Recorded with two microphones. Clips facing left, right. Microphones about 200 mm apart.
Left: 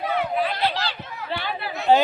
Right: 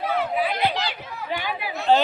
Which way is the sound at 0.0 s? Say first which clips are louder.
Even; centre (ahead or behind).